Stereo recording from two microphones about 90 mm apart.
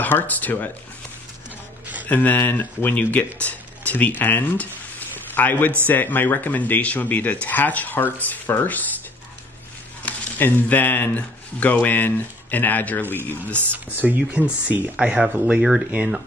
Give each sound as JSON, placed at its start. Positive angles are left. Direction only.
{"t": 0.0, "sound": "speech", "side_deg": 20}
{"t": 2.0, "sound": "speech", "side_deg": 20}
{"t": 5.1, "sound": "a sound", "side_deg": 20}
{"t": 5.9, "sound": "speech", "side_deg": 20}
{"t": 10.0, "sound": "speech", "side_deg": 20}
{"t": 13.7, "sound": "speech", "side_deg": -20}